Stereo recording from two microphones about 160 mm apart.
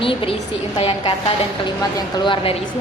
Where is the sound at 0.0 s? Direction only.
35° left (ahead or behind).